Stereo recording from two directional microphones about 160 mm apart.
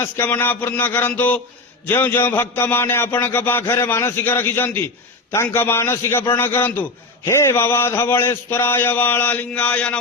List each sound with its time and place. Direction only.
0.0 s a man's voice: 15° left (ahead or behind)